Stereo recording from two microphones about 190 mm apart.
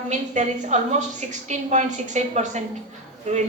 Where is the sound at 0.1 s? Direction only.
40° right (ahead or behind).